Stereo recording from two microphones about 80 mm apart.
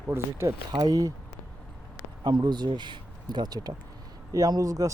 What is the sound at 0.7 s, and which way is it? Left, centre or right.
Speech, right.